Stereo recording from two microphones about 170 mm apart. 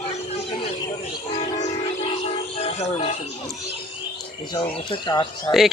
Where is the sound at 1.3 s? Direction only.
45° left (ahead or behind).